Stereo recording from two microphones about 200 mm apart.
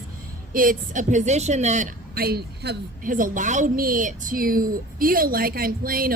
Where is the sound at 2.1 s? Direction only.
50° right (ahead or behind).